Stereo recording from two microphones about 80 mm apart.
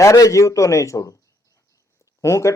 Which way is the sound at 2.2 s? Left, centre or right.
Left.